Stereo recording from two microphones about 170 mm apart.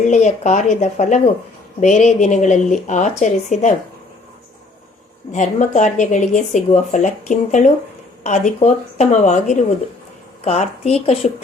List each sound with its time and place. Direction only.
0.0 s speech: 45° left (ahead or behind)
5.3 s a woman's voice: 45° left (ahead or behind)